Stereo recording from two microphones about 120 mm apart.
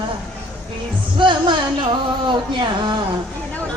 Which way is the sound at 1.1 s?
40° right (ahead or behind).